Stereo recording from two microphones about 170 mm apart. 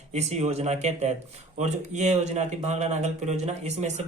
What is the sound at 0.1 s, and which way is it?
Speech, 40° right (ahead or behind).